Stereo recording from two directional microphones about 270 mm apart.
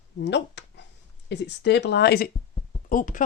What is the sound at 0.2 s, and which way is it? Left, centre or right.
Speech, left.